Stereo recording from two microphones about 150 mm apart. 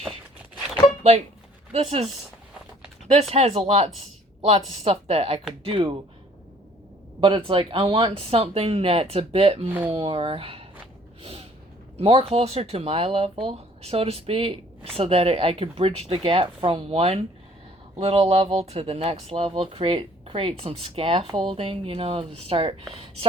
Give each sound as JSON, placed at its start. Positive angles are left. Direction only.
{"t": 1.7, "sound": "speech", "side_deg": -40}
{"t": 3.1, "sound": "speech", "side_deg": -45}
{"t": 7.2, "sound": "speech", "side_deg": -35}
{"t": 11.2, "sound": "gasp", "side_deg": -40}
{"t": 11.9, "sound": "speech", "side_deg": -40}